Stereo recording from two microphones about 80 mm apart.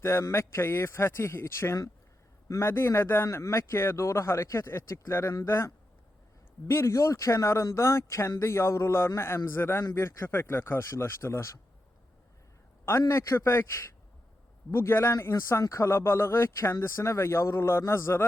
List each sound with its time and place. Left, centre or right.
0.0 s speech: left
13.0 s speech: left